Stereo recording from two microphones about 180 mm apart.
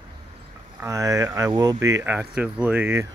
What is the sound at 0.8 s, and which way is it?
Speech, 15° right (ahead or behind).